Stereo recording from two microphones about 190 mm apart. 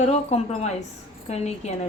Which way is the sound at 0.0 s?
35° left (ahead or behind).